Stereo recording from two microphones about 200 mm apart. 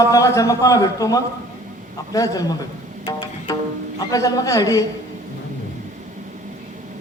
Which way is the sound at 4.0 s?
15° left (ahead or behind).